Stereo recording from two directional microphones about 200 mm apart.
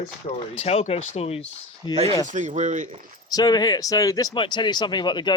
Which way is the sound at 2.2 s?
40° right (ahead or behind).